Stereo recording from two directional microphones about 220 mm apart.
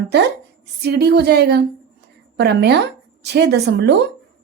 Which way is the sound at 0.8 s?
45° right (ahead or behind).